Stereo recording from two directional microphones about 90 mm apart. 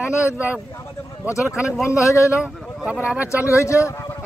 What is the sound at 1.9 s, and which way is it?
Speech, 35° left (ahead or behind).